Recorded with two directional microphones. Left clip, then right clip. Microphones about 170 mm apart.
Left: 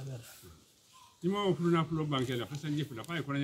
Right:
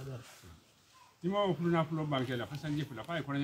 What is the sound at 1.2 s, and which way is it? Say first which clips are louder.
A man's voice: even; centre (ahead or behind).